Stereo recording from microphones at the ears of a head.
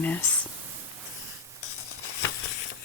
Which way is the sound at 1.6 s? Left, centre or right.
Left.